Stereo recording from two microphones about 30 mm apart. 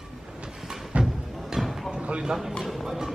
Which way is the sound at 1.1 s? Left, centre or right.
Centre.